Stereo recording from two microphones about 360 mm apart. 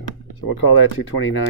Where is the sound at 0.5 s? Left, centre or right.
Left.